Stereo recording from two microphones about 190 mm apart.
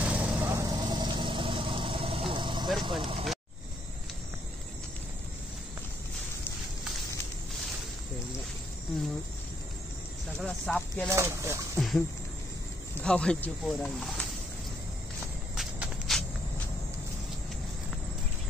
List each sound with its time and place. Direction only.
0.0 s vehicle: 10° right (ahead or behind)
2.8 s speech: 25° right (ahead or behind)
10.4 s speech: 5° left (ahead or behind)
11.1 s speech: 15° right (ahead or behind)
11.8 s a sound: centre (ahead or behind)
13.0 s speech: 5° left (ahead or behind)
15.5 s walk: centre (ahead or behind)